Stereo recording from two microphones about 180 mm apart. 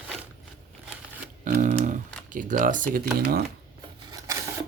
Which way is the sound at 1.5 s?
45° right (ahead or behind).